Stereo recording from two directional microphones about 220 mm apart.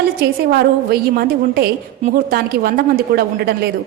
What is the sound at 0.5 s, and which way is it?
A woman's voice, 45° right (ahead or behind).